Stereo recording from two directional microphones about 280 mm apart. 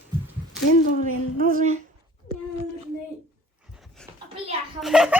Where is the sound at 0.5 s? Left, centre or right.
Left.